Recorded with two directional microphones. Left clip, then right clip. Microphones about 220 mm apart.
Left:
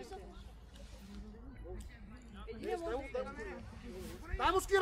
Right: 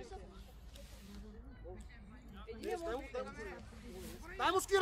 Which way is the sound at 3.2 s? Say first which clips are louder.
Left 2 dB; 10° right (ahead or behind).